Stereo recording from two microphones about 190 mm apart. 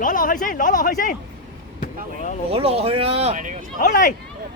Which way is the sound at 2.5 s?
30° right (ahead or behind).